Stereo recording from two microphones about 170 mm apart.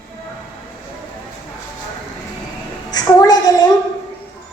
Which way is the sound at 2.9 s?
20° left (ahead or behind).